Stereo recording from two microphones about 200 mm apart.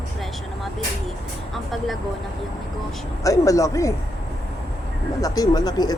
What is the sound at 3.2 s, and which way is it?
Speech, 15° left (ahead or behind).